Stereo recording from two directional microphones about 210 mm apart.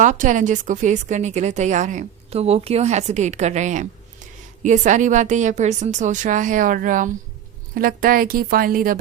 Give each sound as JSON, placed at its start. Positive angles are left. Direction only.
{"t": 0.0, "sound": "a woman's voice", "side_deg": -35}